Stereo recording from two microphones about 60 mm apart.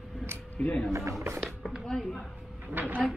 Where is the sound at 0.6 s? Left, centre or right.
Centre.